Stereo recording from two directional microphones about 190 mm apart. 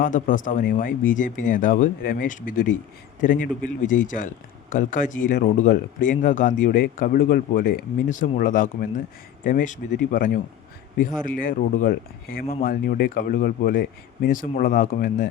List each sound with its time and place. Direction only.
0.0 s speech: 45° left (ahead or behind)